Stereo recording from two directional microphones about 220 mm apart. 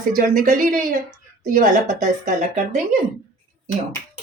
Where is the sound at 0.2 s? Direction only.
40° right (ahead or behind).